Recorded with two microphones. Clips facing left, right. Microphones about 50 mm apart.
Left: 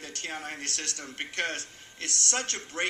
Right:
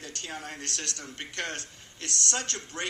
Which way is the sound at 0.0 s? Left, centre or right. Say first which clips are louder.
Left 2 dB; left.